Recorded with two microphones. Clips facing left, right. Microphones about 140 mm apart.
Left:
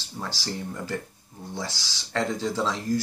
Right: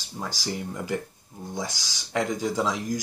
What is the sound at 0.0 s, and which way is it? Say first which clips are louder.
Speech: right 1 dB; 15° right (ahead or behind).